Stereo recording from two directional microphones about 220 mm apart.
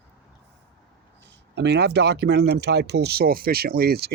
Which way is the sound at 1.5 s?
50° right (ahead or behind).